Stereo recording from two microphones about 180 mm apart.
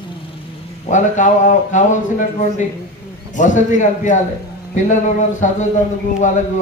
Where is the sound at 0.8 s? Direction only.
45° left (ahead or behind).